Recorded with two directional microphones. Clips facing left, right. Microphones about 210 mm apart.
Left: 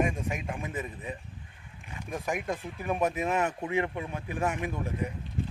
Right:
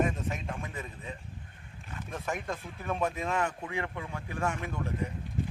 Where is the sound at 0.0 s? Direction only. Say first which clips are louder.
Left 1 dB; 15° left (ahead or behind).